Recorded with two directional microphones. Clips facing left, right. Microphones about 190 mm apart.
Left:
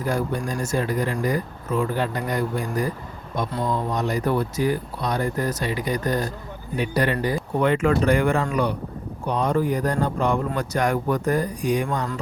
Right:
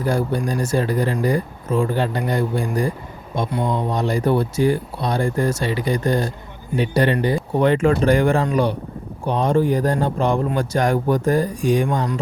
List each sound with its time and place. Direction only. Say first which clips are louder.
0.0 s speech: right 4 dB; 30° right (ahead or behind)